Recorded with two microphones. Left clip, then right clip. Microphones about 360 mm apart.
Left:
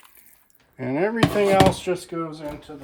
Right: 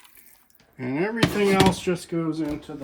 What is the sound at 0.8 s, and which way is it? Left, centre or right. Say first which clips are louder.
Speech: left 3 dB; centre.